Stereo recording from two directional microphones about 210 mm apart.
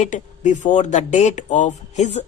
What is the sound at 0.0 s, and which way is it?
A woman's voice, 35° left (ahead or behind).